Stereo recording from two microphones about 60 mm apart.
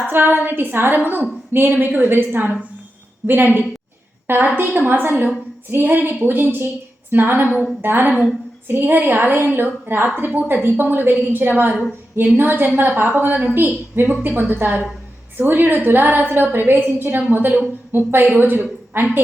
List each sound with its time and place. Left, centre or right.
0.1 s a woman's voice: right